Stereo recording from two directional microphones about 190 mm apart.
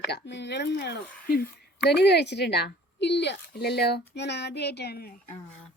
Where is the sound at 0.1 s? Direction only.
65° left (ahead or behind).